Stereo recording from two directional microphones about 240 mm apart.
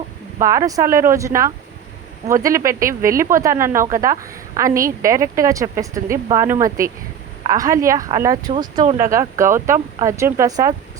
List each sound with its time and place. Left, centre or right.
0.3 s speech: centre